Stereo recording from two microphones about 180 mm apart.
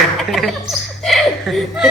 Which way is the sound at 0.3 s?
Centre (ahead or behind).